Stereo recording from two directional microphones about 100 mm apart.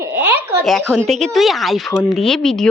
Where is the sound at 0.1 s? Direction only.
25° right (ahead or behind).